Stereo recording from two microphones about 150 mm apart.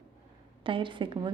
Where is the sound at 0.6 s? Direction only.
35° right (ahead or behind).